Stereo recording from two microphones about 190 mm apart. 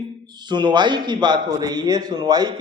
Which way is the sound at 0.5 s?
25° right (ahead or behind).